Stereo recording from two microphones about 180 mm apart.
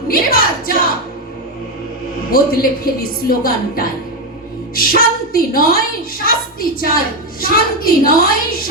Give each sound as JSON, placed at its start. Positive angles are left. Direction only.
{"t": 0.1, "sound": "music", "side_deg": 55}
{"t": 2.3, "sound": "a woman's voice", "side_deg": 55}